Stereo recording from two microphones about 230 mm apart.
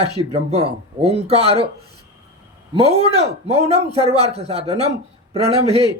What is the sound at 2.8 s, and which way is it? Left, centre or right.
A man's voice, right.